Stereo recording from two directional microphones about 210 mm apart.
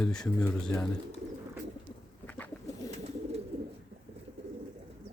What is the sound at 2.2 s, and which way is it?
Bird, 10° left (ahead or behind).